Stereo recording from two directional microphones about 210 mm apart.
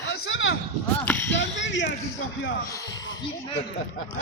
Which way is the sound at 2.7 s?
15° left (ahead or behind).